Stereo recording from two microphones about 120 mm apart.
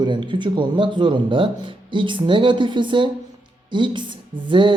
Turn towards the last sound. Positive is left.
turn(degrees=-40)  # may be behind; listen again after turning